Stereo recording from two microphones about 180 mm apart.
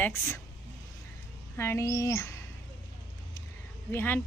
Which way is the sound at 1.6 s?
15° left (ahead or behind).